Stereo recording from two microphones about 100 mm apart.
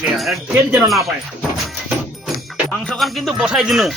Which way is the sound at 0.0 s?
Centre (ahead or behind).